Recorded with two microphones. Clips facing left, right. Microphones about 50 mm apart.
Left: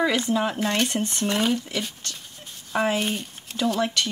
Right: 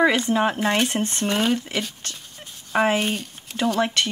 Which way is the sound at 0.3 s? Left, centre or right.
Right.